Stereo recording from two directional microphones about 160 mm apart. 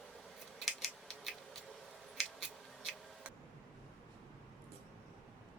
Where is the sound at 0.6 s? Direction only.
Centre (ahead or behind).